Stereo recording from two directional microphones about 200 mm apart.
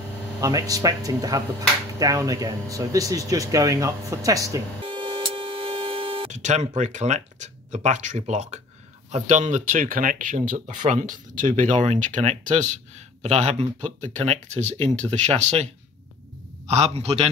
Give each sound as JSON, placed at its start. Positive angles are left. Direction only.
{"t": 0.4, "sound": "speech", "side_deg": -15}